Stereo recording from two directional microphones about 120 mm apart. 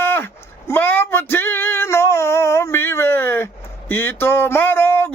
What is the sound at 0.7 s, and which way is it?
Female singing, 15° left (ahead or behind).